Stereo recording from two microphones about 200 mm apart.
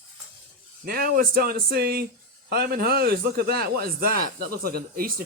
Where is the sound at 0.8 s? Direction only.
50° right (ahead or behind).